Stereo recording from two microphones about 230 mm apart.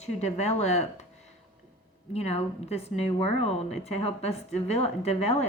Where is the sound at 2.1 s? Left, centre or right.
Left.